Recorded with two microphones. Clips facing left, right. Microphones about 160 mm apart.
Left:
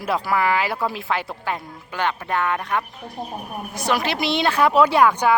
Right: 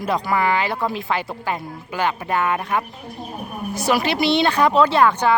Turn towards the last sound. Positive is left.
turn(degrees=10)  # may be behind; listen again after turning